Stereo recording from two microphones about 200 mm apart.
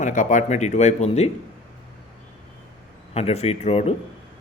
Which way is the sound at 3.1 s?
30° left (ahead or behind).